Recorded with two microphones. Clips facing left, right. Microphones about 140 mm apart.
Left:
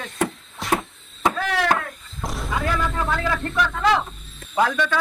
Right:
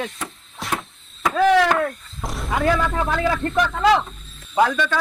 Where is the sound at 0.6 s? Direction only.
Centre (ahead or behind).